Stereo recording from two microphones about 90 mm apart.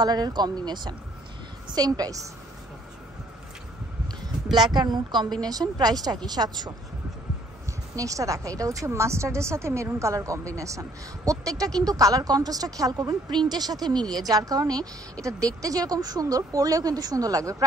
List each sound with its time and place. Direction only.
0.0 s speech: 50° right (ahead or behind)
4.6 s speech: 55° right (ahead or behind)
7.9 s a woman's voice: 40° right (ahead or behind)